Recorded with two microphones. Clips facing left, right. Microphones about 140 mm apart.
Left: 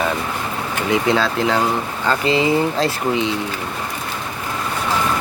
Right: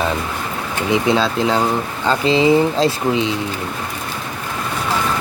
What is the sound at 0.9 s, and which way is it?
Speech, 20° right (ahead or behind).